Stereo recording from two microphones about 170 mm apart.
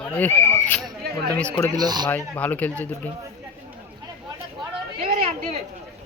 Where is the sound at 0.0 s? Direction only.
10° left (ahead or behind).